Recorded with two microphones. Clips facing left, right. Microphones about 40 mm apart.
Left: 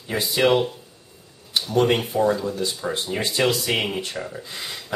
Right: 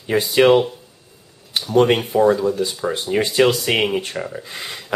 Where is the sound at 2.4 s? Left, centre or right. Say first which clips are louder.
Right 6 dB; centre.